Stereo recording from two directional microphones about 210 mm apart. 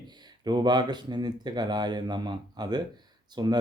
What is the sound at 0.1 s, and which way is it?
Speech, 20° right (ahead or behind).